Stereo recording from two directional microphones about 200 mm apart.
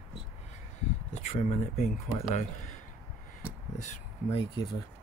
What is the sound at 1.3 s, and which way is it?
Speech, 30° left (ahead or behind).